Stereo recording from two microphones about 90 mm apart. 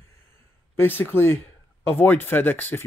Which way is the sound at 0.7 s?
25° left (ahead or behind).